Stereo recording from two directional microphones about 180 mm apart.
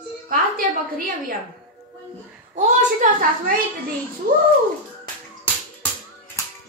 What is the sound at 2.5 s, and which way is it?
Speech, 45° right (ahead or behind).